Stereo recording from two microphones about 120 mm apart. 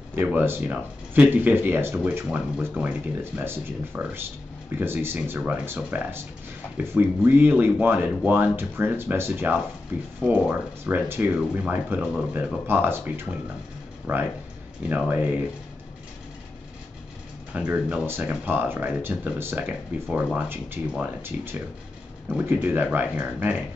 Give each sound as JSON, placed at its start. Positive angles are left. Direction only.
{"t": 0.1, "sound": "speech", "side_deg": -15}
{"t": 2.2, "sound": "speech", "side_deg": -5}
{"t": 12.6, "sound": "speech", "side_deg": -20}
{"t": 17.5, "sound": "speech", "side_deg": -10}